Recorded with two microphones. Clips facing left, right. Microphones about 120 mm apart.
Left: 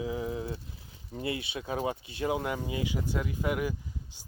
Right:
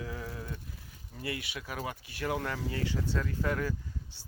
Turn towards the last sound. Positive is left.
turn(degrees=15)  # may be behind; listen again after turning